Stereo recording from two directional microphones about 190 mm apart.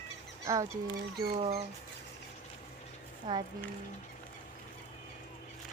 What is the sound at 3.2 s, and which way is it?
Speech, 25° right (ahead or behind).